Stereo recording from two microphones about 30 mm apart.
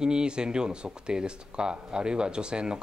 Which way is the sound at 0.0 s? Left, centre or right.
Right.